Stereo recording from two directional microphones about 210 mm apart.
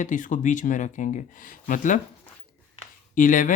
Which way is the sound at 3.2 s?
40° left (ahead or behind).